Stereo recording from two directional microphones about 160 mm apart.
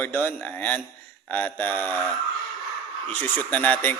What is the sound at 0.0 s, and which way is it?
Speech, 10° left (ahead or behind).